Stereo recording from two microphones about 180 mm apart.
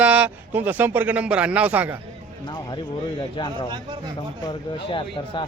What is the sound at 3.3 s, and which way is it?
Speech, 25° left (ahead or behind).